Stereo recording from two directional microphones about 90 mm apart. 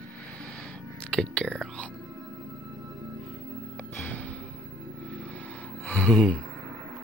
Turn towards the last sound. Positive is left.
turn(degrees=10)  # may be behind; listen again after turning